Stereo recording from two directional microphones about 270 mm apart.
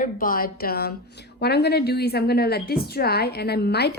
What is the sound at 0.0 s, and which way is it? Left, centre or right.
A woman's voice, left.